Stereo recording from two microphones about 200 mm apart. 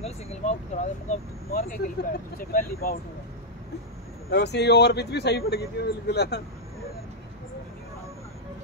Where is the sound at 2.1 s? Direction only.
45° left (ahead or behind).